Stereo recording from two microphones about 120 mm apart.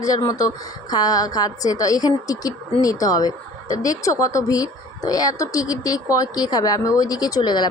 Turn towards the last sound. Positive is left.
turn(degrees=35)  # may be behind; listen again after turning